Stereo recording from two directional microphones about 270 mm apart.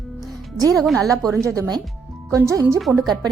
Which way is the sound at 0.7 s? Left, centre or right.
Centre.